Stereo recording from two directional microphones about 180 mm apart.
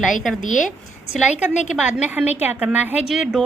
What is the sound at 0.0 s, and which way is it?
A woman's voice, centre (ahead or behind).